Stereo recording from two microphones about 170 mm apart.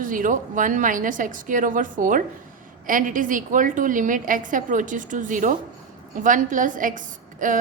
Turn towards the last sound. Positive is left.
turn(degrees=-50)  # may be behind; listen again after turning